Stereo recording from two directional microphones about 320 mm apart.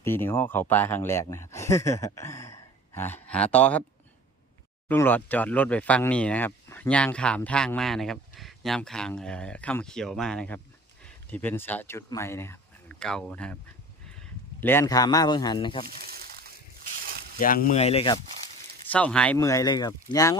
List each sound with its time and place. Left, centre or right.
0.0 s speech: centre
4.9 s speech: centre
14.6 s speech: centre
15.9 s a sound: right
17.3 s speech: left
18.9 s speech: centre